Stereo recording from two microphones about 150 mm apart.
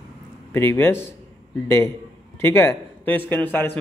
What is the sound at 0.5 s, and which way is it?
A man's voice, 15° left (ahead or behind).